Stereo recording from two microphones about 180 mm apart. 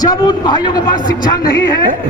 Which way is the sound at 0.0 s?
20° left (ahead or behind).